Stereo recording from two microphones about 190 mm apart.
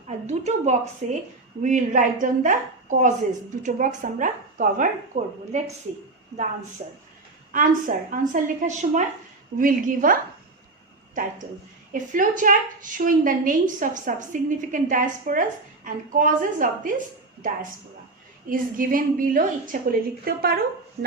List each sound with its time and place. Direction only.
0.3 s a woman's voice: 35° right (ahead or behind)
6.8 s a woman's voice: 40° right (ahead or behind)
18.4 s a woman's voice: 45° right (ahead or behind)